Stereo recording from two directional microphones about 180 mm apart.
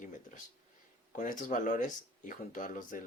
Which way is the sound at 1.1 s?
45° left (ahead or behind).